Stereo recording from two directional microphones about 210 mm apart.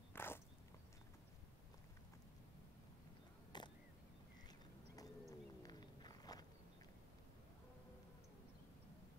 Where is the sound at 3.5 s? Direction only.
20° left (ahead or behind).